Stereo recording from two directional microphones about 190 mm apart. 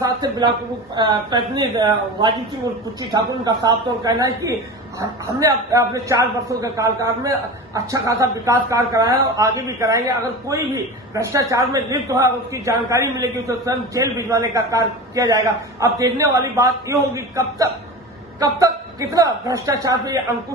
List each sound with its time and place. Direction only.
0.0 s a woman's voice: 20° right (ahead or behind)